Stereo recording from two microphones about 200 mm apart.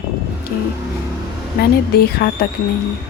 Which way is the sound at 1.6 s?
50° left (ahead or behind).